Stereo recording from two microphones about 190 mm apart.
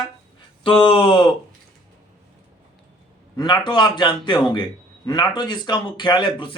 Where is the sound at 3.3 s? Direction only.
25° left (ahead or behind).